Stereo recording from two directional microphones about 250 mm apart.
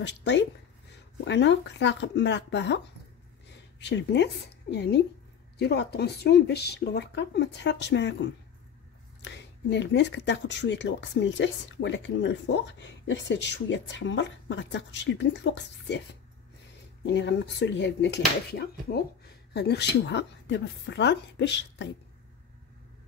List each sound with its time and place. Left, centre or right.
0.0 s speech: left
3.8 s speech: left
17.0 s speech: left